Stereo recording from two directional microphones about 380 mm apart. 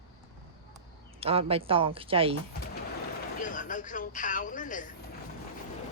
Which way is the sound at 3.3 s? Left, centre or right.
Left.